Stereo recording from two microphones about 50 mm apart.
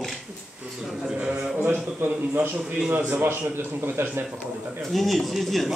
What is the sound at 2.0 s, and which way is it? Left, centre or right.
Speech, right.